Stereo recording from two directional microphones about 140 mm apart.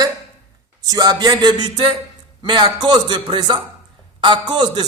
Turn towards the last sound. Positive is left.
turn(degrees=-30)  # may be behind; listen again after turning